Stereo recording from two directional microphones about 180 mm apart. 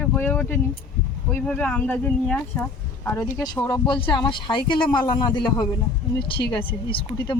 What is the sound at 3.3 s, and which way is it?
Speech, 20° left (ahead or behind).